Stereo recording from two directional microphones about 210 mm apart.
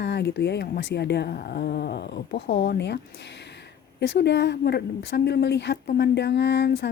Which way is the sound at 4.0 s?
55° left (ahead or behind).